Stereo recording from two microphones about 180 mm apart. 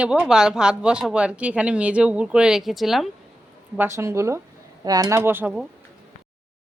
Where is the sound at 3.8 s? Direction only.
15° right (ahead or behind).